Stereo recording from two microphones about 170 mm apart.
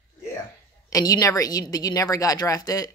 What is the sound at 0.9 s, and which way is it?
Speech, 20° left (ahead or behind).